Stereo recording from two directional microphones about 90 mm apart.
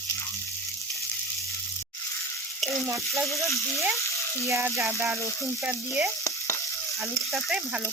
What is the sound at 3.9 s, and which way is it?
Frying, 35° left (ahead or behind).